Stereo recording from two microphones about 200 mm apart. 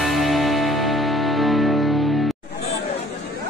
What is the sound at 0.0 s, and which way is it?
Music, centre (ahead or behind).